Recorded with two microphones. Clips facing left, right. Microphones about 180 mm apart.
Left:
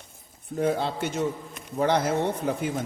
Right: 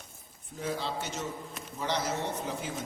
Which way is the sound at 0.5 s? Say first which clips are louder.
Left 9 dB; 60° left (ahead or behind).